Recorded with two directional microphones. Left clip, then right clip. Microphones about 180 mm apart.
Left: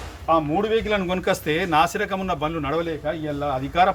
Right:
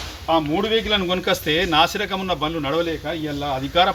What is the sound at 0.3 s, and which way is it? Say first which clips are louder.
A man's voice: even; 30° left (ahead or behind).